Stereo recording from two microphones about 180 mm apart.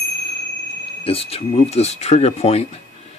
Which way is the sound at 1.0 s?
35° left (ahead or behind).